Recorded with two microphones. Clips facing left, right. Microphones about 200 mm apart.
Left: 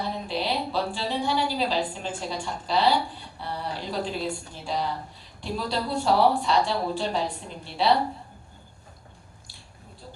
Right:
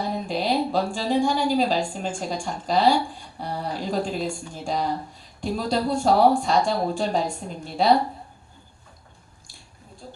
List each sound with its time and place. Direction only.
0.3 s a woman's voice: 45° right (ahead or behind)